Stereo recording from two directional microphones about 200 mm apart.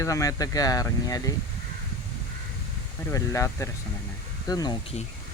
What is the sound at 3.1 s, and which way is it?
Speech, 15° left (ahead or behind).